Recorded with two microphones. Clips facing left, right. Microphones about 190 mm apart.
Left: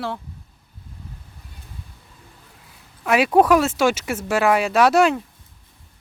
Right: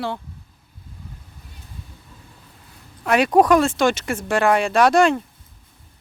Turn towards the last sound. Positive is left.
turn(degrees=5)  # may be behind; listen again after turning